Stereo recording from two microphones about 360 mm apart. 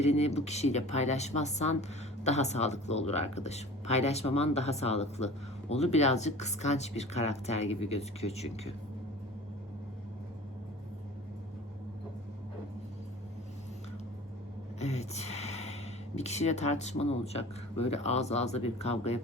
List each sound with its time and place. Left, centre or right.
0.0 s speech: centre
14.8 s speech: centre